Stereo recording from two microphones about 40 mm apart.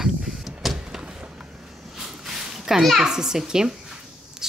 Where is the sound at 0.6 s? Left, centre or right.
Centre.